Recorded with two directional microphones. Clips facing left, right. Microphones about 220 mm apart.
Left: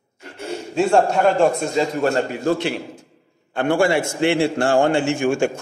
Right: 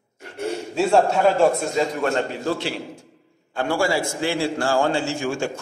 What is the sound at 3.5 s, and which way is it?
A man's voice, 60° left (ahead or behind).